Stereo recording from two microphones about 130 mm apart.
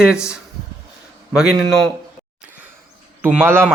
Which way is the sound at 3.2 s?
10° right (ahead or behind).